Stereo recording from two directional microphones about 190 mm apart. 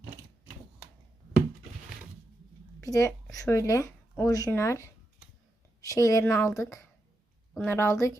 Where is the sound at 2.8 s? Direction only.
15° left (ahead or behind).